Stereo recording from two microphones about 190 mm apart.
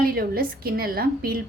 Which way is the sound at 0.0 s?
50° right (ahead or behind).